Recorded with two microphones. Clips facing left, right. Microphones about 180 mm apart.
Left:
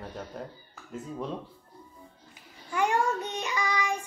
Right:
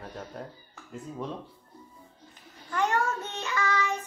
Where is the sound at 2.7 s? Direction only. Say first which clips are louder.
Left 1 dB; 10° left (ahead or behind).